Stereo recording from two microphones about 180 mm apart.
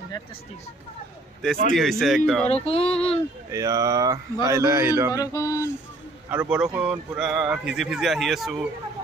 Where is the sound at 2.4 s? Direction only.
35° left (ahead or behind).